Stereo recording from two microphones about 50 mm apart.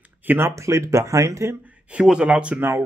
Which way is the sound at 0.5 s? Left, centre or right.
Right.